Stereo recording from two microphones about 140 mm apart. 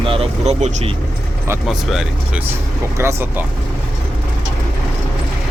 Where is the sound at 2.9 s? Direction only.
20° right (ahead or behind).